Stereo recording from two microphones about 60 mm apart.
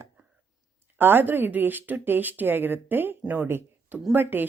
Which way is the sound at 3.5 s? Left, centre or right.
Right.